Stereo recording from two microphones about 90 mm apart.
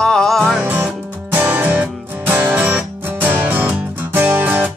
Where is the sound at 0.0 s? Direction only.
10° left (ahead or behind).